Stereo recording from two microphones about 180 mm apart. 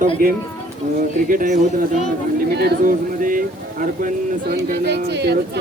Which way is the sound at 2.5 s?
60° right (ahead or behind).